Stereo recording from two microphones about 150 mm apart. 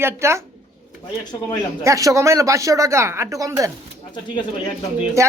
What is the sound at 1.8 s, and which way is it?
Speech, 20° right (ahead or behind).